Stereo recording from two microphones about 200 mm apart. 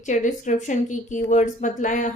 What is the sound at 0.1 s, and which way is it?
Speech, 40° left (ahead or behind).